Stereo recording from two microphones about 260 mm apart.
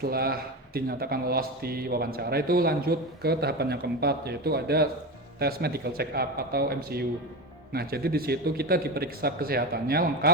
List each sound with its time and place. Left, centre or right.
0.0 s a man's voice: right